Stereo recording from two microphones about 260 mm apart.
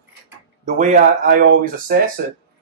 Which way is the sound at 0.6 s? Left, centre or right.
Right.